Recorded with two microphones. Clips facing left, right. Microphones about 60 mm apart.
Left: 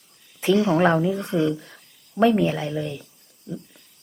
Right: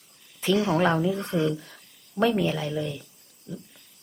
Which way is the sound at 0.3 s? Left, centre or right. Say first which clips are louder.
Left 4 dB; left.